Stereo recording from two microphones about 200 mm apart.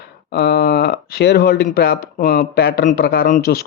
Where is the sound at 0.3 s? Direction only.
50° left (ahead or behind).